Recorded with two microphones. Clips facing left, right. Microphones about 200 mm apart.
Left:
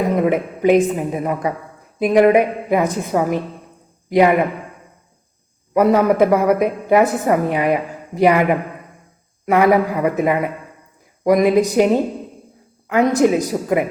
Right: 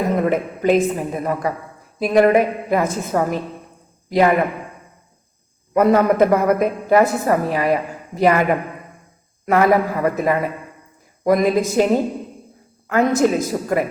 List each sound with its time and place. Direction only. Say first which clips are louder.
0.2 s a woman's voice: left 2 dB; 10° left (ahead or behind)
5.7 s a woman's voice: left 1 dB; 5° left (ahead or behind)
12.9 s a woman's voice: left 2 dB; 15° left (ahead or behind)